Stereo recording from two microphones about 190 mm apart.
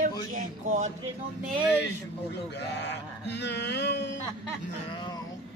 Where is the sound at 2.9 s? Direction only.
65° left (ahead or behind).